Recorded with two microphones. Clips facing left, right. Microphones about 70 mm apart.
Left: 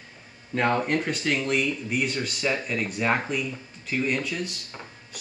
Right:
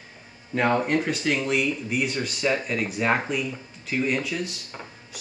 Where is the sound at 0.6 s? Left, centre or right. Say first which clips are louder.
Right 2 dB; centre.